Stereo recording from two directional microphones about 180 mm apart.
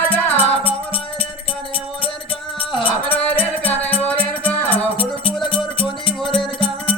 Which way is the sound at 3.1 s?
10° left (ahead or behind).